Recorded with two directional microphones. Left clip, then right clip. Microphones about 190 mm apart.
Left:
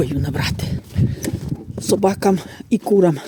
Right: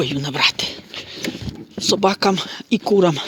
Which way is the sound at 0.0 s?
35° left (ahead or behind).